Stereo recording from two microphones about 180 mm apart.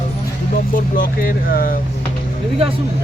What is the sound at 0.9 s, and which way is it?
Speech, 50° left (ahead or behind).